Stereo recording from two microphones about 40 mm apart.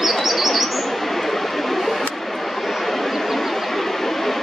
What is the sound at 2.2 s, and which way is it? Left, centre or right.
Vehicle, centre.